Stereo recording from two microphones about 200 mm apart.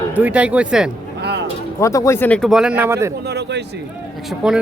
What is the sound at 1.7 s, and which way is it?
Speech, 15° left (ahead or behind).